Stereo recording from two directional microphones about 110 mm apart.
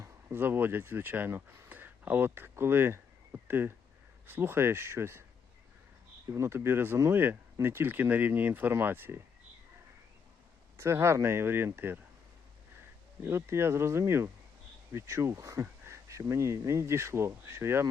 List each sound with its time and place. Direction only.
0.0 s speech: 20° right (ahead or behind)
6.3 s speech: 25° right (ahead or behind)
10.8 s speech: 25° right (ahead or behind)
13.2 s speech: 20° right (ahead or behind)